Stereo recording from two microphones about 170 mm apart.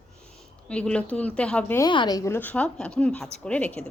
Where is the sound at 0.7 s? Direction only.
5° left (ahead or behind).